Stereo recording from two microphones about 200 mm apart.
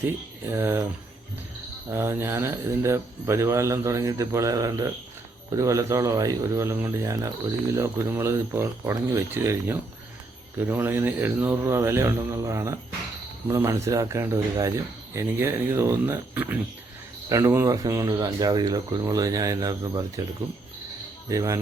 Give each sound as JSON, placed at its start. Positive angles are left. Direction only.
{"t": 0.5, "sound": "a man's voice", "side_deg": -10}
{"t": 1.9, "sound": "a man's voice", "side_deg": -10}
{"t": 21.2, "sound": "a man's voice", "side_deg": -15}